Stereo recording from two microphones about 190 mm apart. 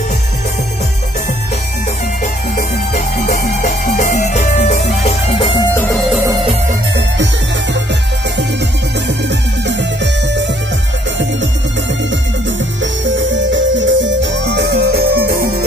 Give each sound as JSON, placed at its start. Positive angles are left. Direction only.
{"t": 2.5, "sound": "music", "side_deg": 50}
{"t": 5.3, "sound": "music", "side_deg": 25}
{"t": 5.7, "sound": "music", "side_deg": 10}
{"t": 12.8, "sound": "music", "side_deg": -75}